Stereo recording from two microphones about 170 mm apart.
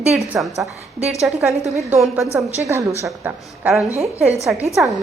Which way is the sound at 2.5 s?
15° right (ahead or behind).